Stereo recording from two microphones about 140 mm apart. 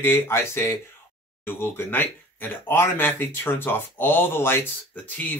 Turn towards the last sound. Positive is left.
turn(degrees=15)  # may be behind; listen again after turning